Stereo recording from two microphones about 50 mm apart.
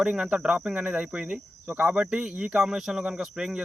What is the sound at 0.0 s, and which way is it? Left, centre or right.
Speech, centre.